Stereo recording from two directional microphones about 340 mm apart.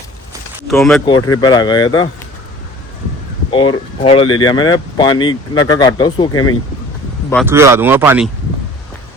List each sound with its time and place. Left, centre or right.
0.7 s speech: centre
1.0 s speech: centre
3.5 s speech: centre
7.4 s speech: centre